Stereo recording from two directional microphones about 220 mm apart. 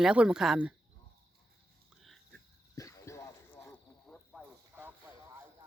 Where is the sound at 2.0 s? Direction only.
Centre (ahead or behind).